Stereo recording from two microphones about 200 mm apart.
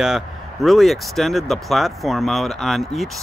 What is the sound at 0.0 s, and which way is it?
Speech, centre (ahead or behind).